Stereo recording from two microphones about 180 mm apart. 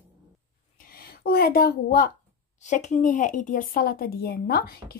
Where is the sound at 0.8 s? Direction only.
55° left (ahead or behind).